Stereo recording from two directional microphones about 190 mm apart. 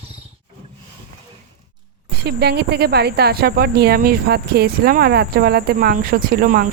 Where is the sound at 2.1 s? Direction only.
60° right (ahead or behind).